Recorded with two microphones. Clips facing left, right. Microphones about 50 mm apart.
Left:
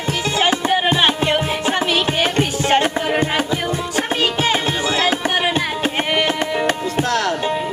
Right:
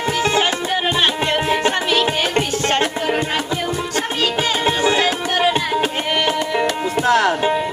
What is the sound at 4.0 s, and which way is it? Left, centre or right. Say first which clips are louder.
Music: left 1 dB; centre.